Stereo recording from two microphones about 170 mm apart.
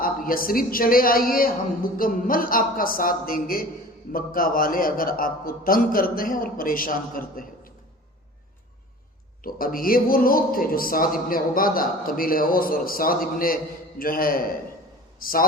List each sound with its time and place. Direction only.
0.0 s a man's voice: 55° left (ahead or behind)
9.4 s a man's voice: 60° left (ahead or behind)